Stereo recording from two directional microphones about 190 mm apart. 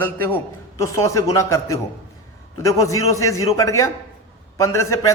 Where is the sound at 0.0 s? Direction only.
10° left (ahead or behind).